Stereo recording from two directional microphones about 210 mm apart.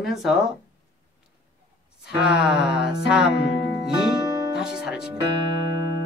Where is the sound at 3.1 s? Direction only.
55° left (ahead or behind).